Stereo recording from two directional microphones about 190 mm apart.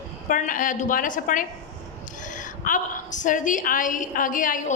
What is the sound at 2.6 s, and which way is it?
A woman's voice, 45° left (ahead or behind).